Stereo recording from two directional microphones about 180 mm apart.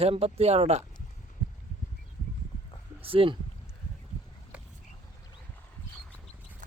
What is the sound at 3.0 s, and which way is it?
Speech, 30° right (ahead or behind).